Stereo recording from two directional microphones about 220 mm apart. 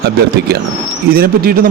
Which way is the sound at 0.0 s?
45° right (ahead or behind).